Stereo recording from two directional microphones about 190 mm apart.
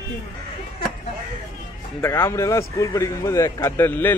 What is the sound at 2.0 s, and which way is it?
A man's voice, 15° left (ahead or behind).